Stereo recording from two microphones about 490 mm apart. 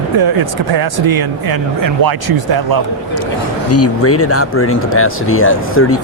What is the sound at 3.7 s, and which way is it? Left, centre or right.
Speech, left.